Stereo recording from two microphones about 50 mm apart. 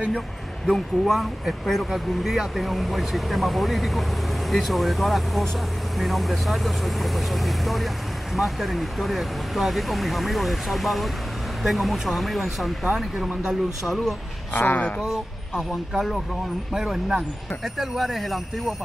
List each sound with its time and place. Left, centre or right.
0.7 s speech: centre
13.4 s speech: centre
14.5 s speech: left
16.7 s speech: centre